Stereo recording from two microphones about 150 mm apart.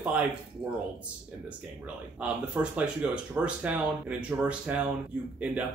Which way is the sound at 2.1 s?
10° right (ahead or behind).